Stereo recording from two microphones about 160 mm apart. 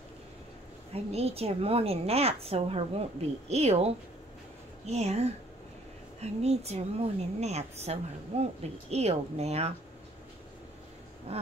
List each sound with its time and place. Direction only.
0.9 s a woman's voice: 40° right (ahead or behind)
11.3 s a woman's voice: 40° right (ahead or behind)